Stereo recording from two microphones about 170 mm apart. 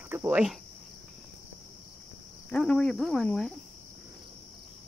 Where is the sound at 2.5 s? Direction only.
5° left (ahead or behind).